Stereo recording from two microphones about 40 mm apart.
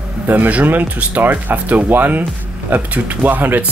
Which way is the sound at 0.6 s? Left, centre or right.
Right.